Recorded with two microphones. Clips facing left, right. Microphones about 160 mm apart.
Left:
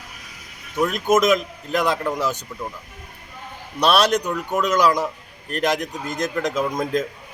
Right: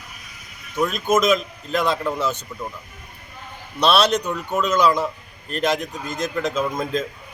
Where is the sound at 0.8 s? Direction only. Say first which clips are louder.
Left 1 dB; 15° left (ahead or behind).